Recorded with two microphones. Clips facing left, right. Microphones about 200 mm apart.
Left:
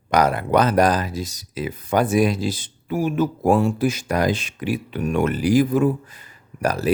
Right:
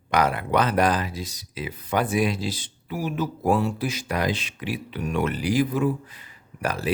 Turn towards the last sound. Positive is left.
turn(degrees=40)  # may be behind; listen again after turning